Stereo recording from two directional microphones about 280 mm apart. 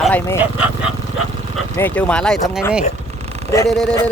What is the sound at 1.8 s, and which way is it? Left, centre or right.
Speech, centre.